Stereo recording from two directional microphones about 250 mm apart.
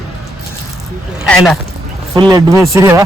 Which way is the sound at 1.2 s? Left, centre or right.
Centre.